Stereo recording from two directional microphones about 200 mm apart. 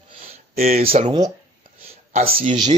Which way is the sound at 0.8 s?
30° right (ahead or behind).